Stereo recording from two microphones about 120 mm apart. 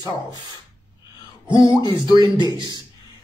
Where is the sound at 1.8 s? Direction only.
40° left (ahead or behind).